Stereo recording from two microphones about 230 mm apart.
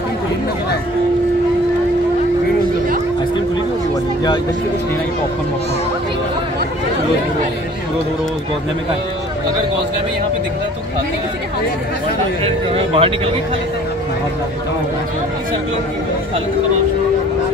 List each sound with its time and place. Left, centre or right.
12.4 s speech: right